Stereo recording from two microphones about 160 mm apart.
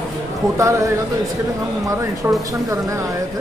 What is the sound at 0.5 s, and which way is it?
Speech, 20° right (ahead or behind).